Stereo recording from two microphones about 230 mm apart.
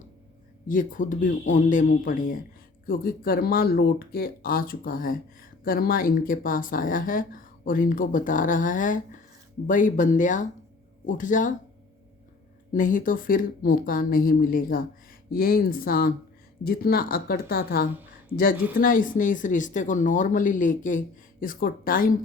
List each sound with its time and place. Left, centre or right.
0.7 s speech: left
12.7 s speech: left